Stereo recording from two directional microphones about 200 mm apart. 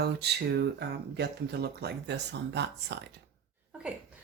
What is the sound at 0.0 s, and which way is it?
Speech, 55° right (ahead or behind).